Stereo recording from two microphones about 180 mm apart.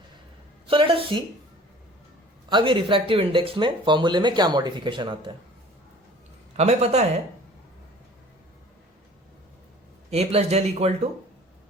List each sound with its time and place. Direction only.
0.7 s speech: 30° right (ahead or behind)
2.5 s speech: 25° right (ahead or behind)
6.6 s speech: 35° right (ahead or behind)
10.1 s speech: 35° right (ahead or behind)